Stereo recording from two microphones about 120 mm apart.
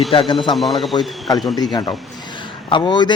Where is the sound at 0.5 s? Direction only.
Centre (ahead or behind).